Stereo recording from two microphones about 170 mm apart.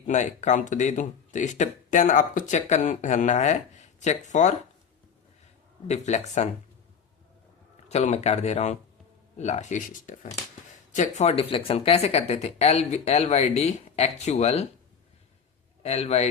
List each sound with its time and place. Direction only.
0.1 s speech: 45° left (ahead or behind)
5.9 s speech: 40° left (ahead or behind)
7.9 s speech: 40° left (ahead or behind)
15.8 s speech: 40° left (ahead or behind)